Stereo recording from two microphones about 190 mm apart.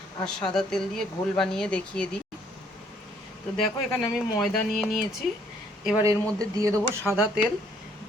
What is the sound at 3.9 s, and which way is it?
Speech, 20° left (ahead or behind).